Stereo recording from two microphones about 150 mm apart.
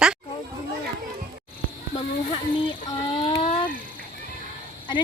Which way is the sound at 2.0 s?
35° left (ahead or behind).